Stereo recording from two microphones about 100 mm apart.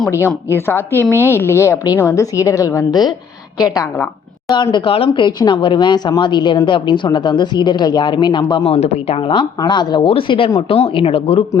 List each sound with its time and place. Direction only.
0.5 s a woman's voice: 25° left (ahead or behind)
4.5 s speech: 50° left (ahead or behind)
8.5 s speech: 90° left
9.6 s speech: 50° left (ahead or behind)
10.7 s speech: 80° left